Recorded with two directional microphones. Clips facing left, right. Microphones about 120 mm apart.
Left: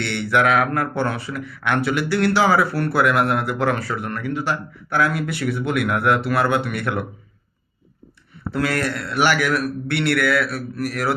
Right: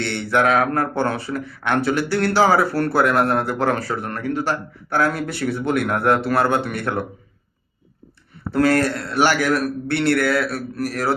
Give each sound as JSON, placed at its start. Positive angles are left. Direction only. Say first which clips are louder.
{"t": 0.0, "sound": "speech", "louder": "even", "side_deg": -35}
{"t": 8.5, "sound": "speech", "louder": "right 5 dB", "side_deg": -40}